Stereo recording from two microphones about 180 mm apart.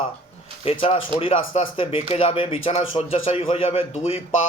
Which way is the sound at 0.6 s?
30° left (ahead or behind).